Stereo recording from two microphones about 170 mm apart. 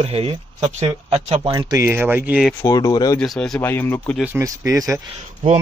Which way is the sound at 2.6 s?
20° left (ahead or behind).